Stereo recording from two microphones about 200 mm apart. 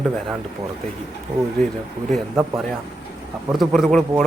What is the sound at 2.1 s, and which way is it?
Speech, centre (ahead or behind).